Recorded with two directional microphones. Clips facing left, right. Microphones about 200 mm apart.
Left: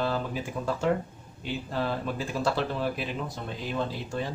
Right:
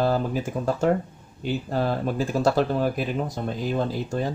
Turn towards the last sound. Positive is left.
turn(degrees=-40)  # may be behind; listen again after turning